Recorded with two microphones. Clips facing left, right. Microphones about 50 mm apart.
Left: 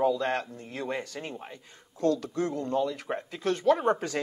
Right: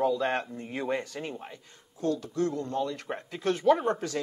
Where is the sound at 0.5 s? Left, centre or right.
Right.